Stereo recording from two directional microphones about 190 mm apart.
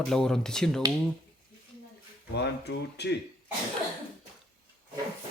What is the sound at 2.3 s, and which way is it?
Speech, 65° left (ahead or behind).